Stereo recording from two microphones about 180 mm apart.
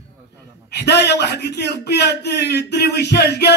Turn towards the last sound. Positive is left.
turn(degrees=65)  # may be behind; listen again after turning